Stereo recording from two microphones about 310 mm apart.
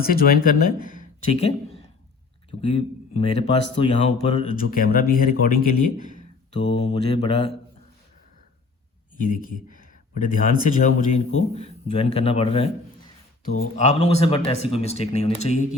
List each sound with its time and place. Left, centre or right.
0.0 s speech: left
9.1 s speech: left
13.7 s speech: left